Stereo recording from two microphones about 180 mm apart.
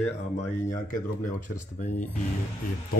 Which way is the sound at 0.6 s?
45° left (ahead or behind).